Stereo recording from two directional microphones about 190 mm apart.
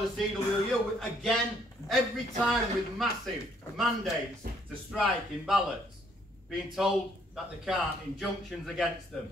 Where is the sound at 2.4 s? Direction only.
Centre (ahead or behind).